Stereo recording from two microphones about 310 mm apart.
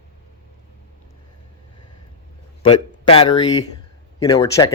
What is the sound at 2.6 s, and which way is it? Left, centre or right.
Speech, centre.